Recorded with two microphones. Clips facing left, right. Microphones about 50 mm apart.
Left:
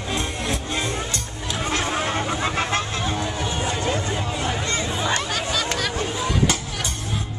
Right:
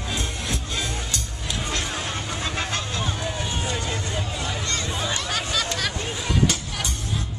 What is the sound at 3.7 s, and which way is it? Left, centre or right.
Vehicle, left.